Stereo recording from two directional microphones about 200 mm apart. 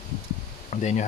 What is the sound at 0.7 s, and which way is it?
Speech, 40° left (ahead or behind).